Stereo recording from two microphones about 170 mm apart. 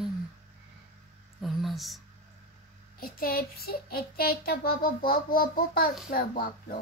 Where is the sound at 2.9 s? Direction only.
60° left (ahead or behind).